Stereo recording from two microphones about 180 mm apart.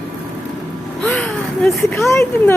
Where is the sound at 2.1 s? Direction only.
15° left (ahead or behind).